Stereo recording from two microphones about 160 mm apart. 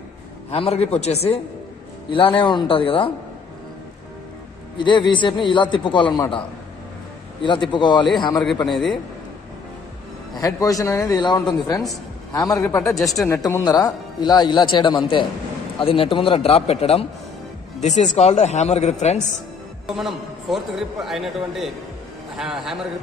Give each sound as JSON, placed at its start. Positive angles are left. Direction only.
{"t": 0.5, "sound": "a man's voice", "side_deg": 40}
{"t": 4.7, "sound": "a man's voice", "side_deg": 30}
{"t": 7.7, "sound": "a man's voice", "side_deg": 30}
{"t": 10.3, "sound": "a man's voice", "side_deg": 20}
{"t": 12.9, "sound": "speech", "side_deg": 0}
{"t": 13.3, "sound": "a man's voice", "side_deg": 20}
{"t": 19.9, "sound": "speech", "side_deg": 0}